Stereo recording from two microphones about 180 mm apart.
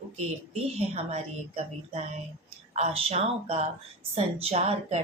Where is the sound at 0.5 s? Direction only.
35° right (ahead or behind).